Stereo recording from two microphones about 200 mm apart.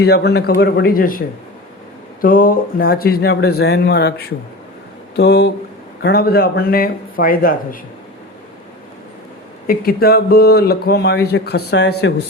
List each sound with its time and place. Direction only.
0.0 s speech: 55° left (ahead or behind)
2.2 s speech: 45° left (ahead or behind)
9.6 s speech: 50° left (ahead or behind)